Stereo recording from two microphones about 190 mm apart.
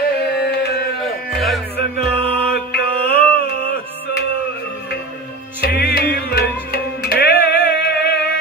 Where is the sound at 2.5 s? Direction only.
55° left (ahead or behind).